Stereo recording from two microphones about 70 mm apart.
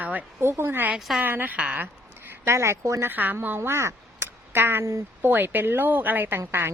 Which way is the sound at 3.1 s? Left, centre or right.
Right.